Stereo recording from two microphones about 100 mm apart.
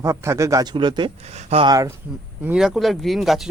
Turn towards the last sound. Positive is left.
turn(degrees=0)  # may be behind; listen again after turning